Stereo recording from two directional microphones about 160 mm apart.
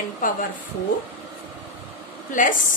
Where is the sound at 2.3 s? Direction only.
55° left (ahead or behind).